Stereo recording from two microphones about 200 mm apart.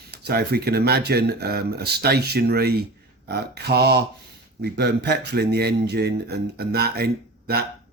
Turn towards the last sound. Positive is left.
turn(degrees=-50)  # may be behind; listen again after turning